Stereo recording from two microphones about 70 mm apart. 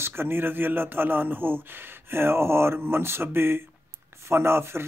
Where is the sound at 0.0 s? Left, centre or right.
Right.